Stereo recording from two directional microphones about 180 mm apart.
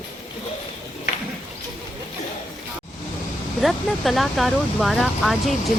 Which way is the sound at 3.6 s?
Centre (ahead or behind).